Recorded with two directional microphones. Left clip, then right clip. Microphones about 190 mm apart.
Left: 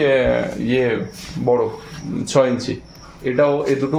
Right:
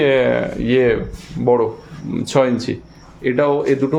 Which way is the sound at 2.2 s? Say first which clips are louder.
Even; 25° right (ahead or behind).